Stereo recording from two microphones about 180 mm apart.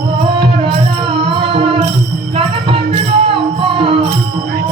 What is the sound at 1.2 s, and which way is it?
Music, 30° right (ahead or behind).